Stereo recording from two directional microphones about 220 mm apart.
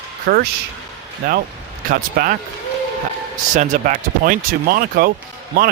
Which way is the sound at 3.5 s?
35° right (ahead or behind).